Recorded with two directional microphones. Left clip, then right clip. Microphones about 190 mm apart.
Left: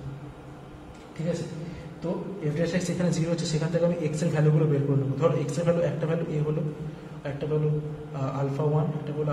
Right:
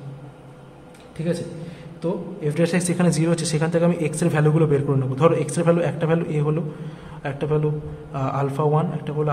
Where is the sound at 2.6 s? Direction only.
50° right (ahead or behind).